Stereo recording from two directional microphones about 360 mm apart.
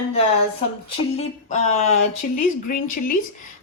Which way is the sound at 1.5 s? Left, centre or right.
Centre.